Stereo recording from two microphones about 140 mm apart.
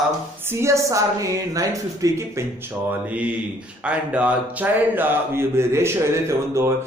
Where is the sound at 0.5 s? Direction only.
20° right (ahead or behind).